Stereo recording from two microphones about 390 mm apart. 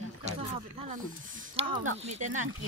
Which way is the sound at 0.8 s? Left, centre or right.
Centre.